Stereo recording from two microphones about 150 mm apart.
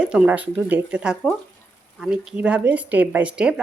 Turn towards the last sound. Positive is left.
turn(degrees=-5)  # may be behind; listen again after turning